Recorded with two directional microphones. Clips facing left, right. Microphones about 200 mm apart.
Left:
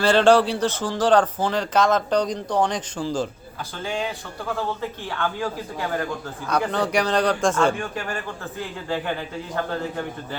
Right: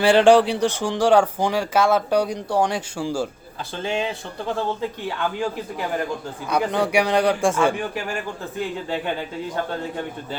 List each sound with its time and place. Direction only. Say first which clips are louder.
0.0 s speech: right 2 dB; 15° right (ahead or behind)
3.8 s speech: right 3 dB; 25° right (ahead or behind)
6.5 s speech: right 2 dB; 15° right (ahead or behind)